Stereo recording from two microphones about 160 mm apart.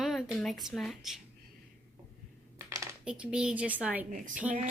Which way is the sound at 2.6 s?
20° right (ahead or behind).